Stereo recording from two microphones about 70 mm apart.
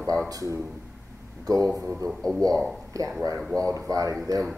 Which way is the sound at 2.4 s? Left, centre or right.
Right.